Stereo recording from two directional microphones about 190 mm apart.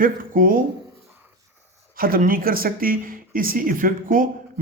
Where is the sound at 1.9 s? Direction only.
50° right (ahead or behind).